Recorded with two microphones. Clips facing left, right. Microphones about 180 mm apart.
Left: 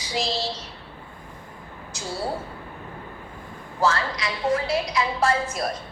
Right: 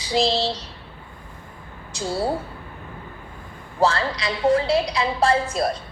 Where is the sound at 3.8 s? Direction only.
30° right (ahead or behind).